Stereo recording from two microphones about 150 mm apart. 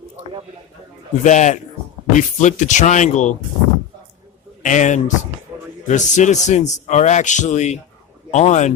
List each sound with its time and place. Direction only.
1.2 s speech: 55° left (ahead or behind)
4.6 s a man's voice: 55° left (ahead or behind)